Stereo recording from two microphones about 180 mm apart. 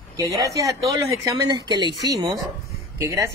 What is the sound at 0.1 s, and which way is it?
Speech, 20° right (ahead or behind).